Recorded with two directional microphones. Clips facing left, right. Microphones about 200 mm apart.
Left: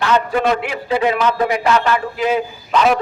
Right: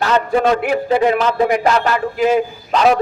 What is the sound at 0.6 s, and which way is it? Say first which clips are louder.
A man's voice: right 4 dB; 45° right (ahead or behind).